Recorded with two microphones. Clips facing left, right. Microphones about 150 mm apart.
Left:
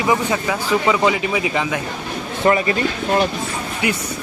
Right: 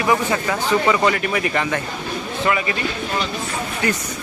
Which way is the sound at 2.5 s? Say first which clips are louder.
Left 5 dB; 35° left (ahead or behind).